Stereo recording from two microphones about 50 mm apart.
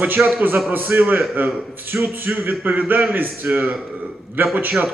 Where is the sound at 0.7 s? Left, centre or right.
Right.